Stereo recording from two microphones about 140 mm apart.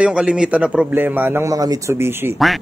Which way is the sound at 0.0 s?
5° right (ahead or behind).